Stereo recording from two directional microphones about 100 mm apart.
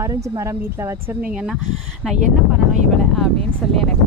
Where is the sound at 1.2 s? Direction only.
10° right (ahead or behind).